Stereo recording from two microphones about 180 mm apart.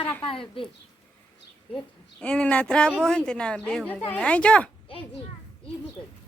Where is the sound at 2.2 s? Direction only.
5° left (ahead or behind).